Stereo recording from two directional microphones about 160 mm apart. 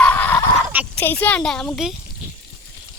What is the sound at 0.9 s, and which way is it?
Speech, 10° left (ahead or behind).